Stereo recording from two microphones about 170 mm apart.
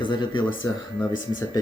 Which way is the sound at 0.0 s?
30° left (ahead or behind).